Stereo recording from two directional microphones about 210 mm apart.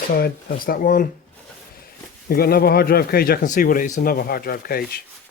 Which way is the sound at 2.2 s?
45° left (ahead or behind).